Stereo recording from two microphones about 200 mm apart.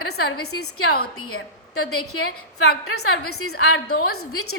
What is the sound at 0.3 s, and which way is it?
A woman's voice, 90° left.